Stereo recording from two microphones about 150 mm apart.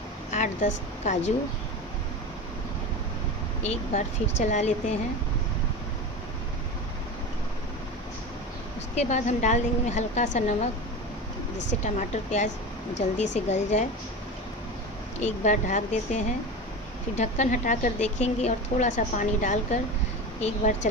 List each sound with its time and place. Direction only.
0.3 s speech: 55° left (ahead or behind)
3.6 s a woman's voice: 50° left (ahead or behind)
8.9 s a woman's voice: 50° left (ahead or behind)
11.8 s a woman's voice: 50° left (ahead or behind)
15.1 s a woman's voice: 50° left (ahead or behind)
17.2 s a woman's voice: 55° left (ahead or behind)